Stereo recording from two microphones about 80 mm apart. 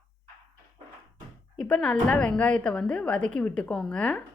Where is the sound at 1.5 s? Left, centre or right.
Centre.